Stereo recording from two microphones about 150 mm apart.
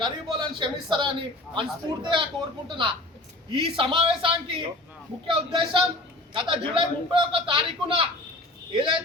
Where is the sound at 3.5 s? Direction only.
35° right (ahead or behind).